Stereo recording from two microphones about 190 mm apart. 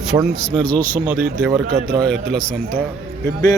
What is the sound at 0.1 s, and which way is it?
Speech, 25° right (ahead or behind).